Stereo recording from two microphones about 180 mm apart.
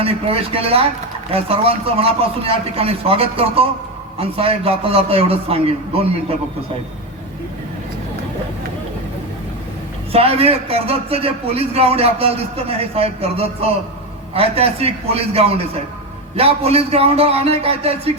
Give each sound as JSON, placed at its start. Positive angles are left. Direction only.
{"t": 0.0, "sound": "a man's voice", "side_deg": -30}
{"t": 10.1, "sound": "a man's voice", "side_deg": -35}